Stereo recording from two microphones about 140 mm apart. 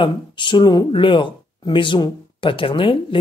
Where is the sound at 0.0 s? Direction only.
35° left (ahead or behind).